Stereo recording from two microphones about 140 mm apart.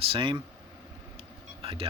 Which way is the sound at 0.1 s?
35° right (ahead or behind).